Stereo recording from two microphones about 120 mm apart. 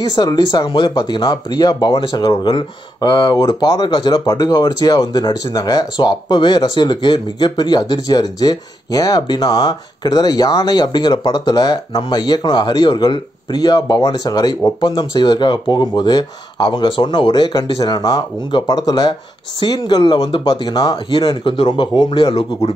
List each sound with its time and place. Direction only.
0.0 s speech: 35° left (ahead or behind)
21.1 s a man's voice: 45° left (ahead or behind)